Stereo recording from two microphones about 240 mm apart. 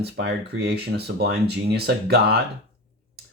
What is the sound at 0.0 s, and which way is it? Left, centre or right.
Speech, right.